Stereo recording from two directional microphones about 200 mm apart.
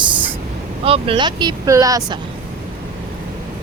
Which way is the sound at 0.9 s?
25° right (ahead or behind).